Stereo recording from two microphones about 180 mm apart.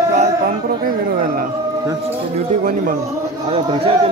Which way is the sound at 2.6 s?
50° right (ahead or behind).